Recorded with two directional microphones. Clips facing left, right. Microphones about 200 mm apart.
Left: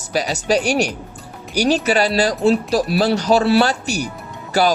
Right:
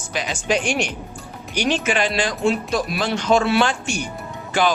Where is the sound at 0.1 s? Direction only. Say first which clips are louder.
Left 4 dB; 40° left (ahead or behind).